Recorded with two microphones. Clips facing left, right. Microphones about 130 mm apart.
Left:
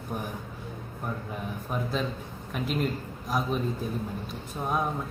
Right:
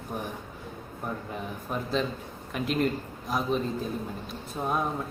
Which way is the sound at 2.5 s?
5° left (ahead or behind).